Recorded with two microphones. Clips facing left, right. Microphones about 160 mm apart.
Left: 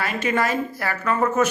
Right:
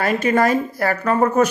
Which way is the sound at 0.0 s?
45° right (ahead or behind).